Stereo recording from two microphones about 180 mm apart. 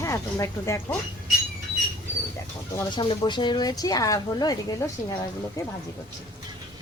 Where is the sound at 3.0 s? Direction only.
25° left (ahead or behind).